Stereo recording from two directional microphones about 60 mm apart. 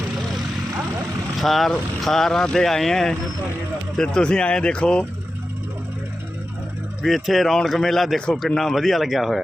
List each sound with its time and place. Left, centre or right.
1.4 s speech: centre
7.0 s speech: centre